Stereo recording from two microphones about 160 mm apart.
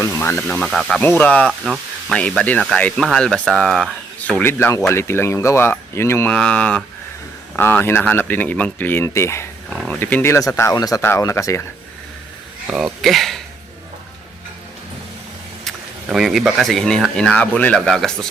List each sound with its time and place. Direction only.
0.0 s speech: 15° left (ahead or behind)
1.5 s speech: 5° right (ahead or behind); by 9.5 s 15° left (ahead or behind)
9.6 s speech: 5° left (ahead or behind); by 11.6 s 20° left (ahead or behind)
12.7 s speech: centre (ahead or behind)
15.6 s speech: centre (ahead or behind)